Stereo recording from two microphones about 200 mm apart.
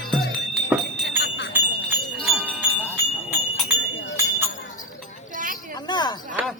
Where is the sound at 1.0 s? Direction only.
60° left (ahead or behind).